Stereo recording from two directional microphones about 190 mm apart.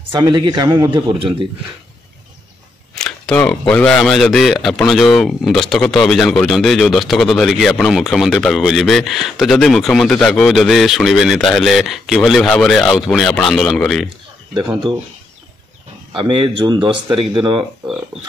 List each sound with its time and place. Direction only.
0.2 s speech: 25° right (ahead or behind)
2.9 s speech: 5° left (ahead or behind)
16.1 s speech: 25° right (ahead or behind)